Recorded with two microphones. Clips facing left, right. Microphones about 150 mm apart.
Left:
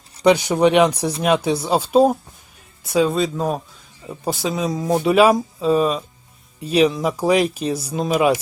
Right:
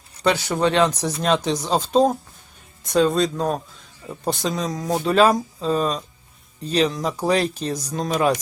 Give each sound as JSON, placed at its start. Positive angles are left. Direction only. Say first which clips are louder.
{"t": 0.2, "sound": "speech", "louder": "left 5 dB", "side_deg": 15}